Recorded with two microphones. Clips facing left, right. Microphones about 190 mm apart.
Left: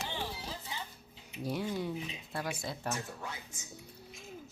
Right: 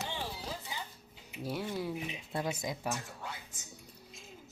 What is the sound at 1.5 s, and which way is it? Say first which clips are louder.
Speech: left 1 dB; centre (ahead or behind).